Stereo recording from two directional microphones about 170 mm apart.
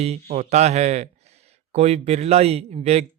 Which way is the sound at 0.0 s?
40° right (ahead or behind).